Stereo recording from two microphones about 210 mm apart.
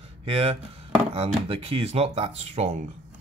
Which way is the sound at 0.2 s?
30° right (ahead or behind).